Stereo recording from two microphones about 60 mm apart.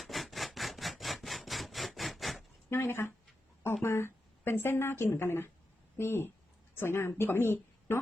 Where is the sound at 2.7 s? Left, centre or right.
Left.